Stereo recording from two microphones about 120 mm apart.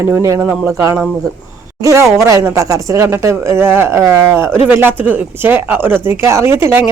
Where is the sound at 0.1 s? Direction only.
25° right (ahead or behind).